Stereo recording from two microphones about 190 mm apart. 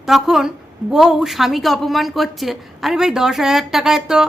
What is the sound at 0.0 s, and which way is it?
A woman's voice, centre (ahead or behind).